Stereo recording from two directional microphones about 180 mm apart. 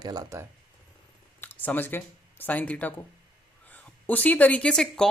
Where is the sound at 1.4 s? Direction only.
10° left (ahead or behind).